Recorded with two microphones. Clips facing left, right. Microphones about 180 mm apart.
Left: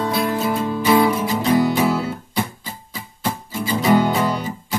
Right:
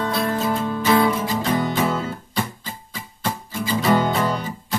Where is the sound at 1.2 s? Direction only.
20° left (ahead or behind).